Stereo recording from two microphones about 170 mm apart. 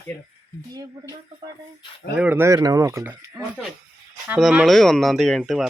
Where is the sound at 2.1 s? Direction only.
10° right (ahead or behind).